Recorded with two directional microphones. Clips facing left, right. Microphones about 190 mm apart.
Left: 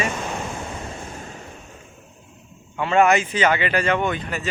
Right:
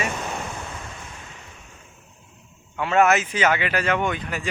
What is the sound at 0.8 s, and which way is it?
Waves, 35° left (ahead or behind).